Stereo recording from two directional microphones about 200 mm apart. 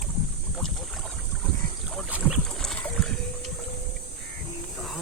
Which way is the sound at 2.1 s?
5° right (ahead or behind).